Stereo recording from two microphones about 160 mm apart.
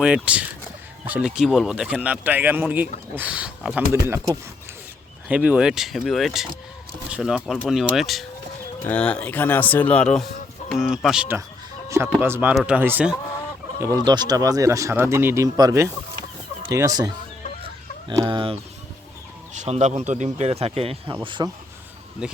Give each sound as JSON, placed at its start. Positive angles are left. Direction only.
{"t": 0.0, "sound": "speech", "side_deg": -5}
{"t": 11.9, "sound": "speech", "side_deg": -15}
{"t": 18.3, "sound": "speech", "side_deg": -35}
{"t": 19.5, "sound": "speech", "side_deg": -45}
{"t": 22.2, "sound": "speech", "side_deg": -5}